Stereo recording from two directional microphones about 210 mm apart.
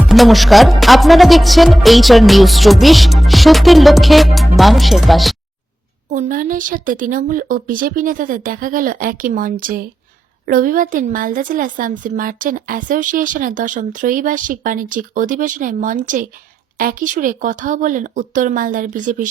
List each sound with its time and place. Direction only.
0.1 s speech: centre (ahead or behind)
6.1 s a woman's voice: 40° right (ahead or behind)